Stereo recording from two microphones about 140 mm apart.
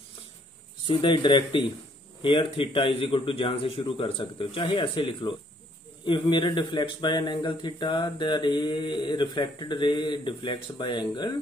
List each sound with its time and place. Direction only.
0.8 s speech: 35° left (ahead or behind)